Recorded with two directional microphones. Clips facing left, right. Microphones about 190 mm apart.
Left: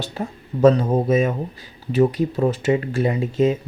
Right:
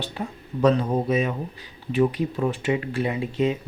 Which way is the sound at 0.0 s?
45° left (ahead or behind).